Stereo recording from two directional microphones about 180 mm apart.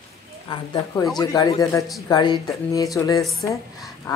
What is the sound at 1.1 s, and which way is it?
Speech, 20° left (ahead or behind).